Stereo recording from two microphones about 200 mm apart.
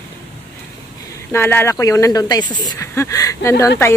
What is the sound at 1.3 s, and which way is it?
Speech, 10° left (ahead or behind).